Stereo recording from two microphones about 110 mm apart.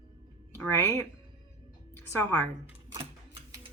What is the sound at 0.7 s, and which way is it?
A woman's voice, 20° left (ahead or behind).